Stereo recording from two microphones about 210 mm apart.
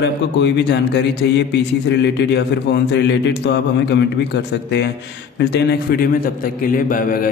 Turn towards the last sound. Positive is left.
turn(degrees=40)  # may be behind; listen again after turning